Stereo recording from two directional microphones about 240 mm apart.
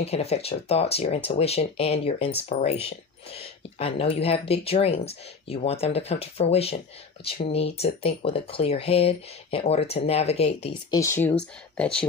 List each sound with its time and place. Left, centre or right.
0.0 s speech: left; by 12.1 s centre